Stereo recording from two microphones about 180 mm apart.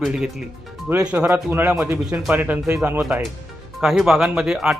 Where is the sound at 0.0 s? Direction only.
5° right (ahead or behind).